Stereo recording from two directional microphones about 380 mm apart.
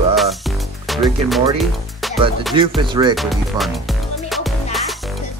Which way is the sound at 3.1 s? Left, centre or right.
Centre.